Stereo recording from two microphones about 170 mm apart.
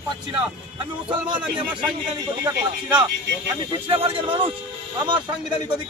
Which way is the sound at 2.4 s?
25° right (ahead or behind).